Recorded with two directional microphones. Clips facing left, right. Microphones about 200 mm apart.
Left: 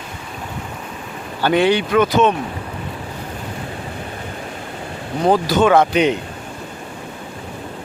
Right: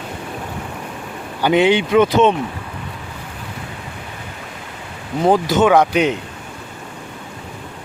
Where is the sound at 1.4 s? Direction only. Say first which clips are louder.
Right 1 dB; 20° right (ahead or behind).